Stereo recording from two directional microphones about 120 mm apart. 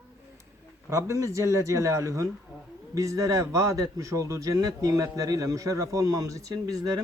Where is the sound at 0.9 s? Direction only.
25° right (ahead or behind).